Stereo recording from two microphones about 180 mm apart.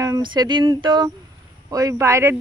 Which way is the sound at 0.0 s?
20° right (ahead or behind).